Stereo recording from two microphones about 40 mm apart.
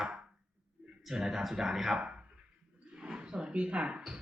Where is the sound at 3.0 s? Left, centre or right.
Right.